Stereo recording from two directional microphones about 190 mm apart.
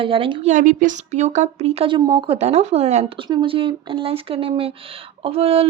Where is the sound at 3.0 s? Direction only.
25° right (ahead or behind).